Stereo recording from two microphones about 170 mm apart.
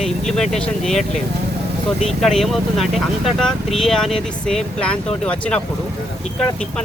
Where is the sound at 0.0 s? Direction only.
Centre (ahead or behind).